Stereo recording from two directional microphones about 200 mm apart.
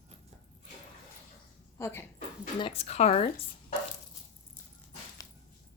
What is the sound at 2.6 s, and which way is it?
Speech, 30° left (ahead or behind).